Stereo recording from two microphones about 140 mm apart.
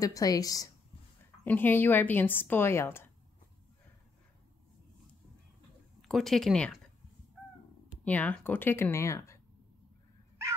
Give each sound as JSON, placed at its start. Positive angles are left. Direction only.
{"t": 0.0, "sound": "a woman's voice", "side_deg": 25}
{"t": 1.4, "sound": "speech", "side_deg": 15}
{"t": 6.0, "sound": "speech", "side_deg": 0}
{"t": 8.0, "sound": "speech", "side_deg": 10}